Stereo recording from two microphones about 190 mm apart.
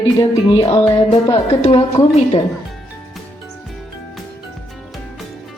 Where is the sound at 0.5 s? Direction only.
25° left (ahead or behind).